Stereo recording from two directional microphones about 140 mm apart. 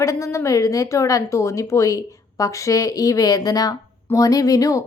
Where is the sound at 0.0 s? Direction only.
20° left (ahead or behind).